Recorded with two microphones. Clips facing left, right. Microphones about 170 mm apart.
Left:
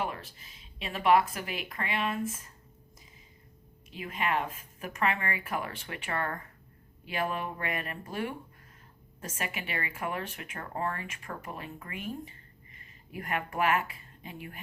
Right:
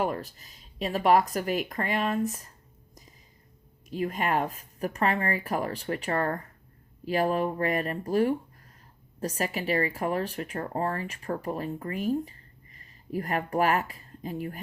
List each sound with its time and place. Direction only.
0.0 s speech: 40° right (ahead or behind)
3.8 s speech: 40° right (ahead or behind)